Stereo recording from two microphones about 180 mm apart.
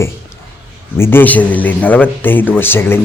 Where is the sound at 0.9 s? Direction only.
15° left (ahead or behind).